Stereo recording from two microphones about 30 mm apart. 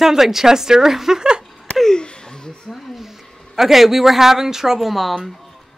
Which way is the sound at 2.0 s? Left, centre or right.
Left.